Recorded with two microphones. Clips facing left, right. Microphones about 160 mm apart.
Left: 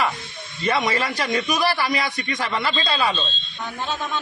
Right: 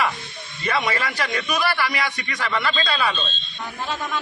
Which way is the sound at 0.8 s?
20° left (ahead or behind).